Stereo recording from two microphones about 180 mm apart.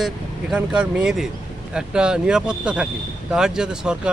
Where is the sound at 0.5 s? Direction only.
5° right (ahead or behind).